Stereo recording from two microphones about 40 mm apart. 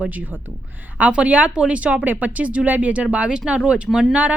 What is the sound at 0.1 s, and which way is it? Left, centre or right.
Speech, right.